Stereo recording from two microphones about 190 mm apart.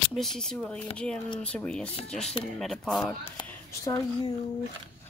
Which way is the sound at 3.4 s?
20° left (ahead or behind).